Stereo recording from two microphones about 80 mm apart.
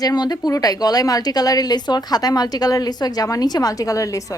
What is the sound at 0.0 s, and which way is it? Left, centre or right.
Speech, left.